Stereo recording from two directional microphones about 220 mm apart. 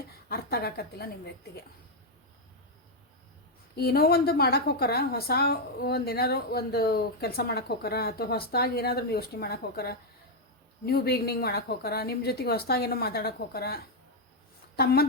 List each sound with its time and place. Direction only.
0.3 s a woman's voice: 45° left (ahead or behind)
3.8 s a woman's voice: 45° left (ahead or behind)